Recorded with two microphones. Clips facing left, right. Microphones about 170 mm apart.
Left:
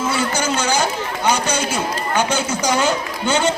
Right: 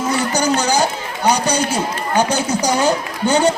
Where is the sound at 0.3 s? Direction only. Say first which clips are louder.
Right 3 dB; 40° right (ahead or behind).